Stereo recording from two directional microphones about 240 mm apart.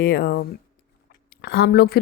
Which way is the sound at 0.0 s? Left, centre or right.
Left.